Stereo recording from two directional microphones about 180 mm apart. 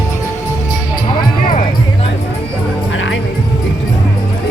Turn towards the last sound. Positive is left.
turn(degrees=85)